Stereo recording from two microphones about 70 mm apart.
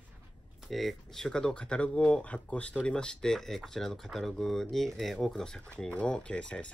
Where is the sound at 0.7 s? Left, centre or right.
Centre.